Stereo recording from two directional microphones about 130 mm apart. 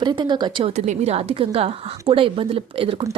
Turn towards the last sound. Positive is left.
turn(degrees=-45)  # may be behind; listen again after turning